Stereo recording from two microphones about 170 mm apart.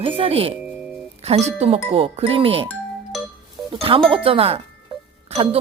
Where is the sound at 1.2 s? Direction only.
40° right (ahead or behind).